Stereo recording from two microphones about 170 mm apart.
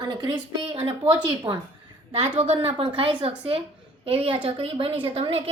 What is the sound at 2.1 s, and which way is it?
A woman's voice, 35° right (ahead or behind).